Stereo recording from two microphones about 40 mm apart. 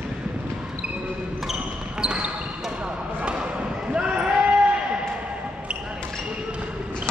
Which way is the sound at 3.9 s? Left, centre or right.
Right.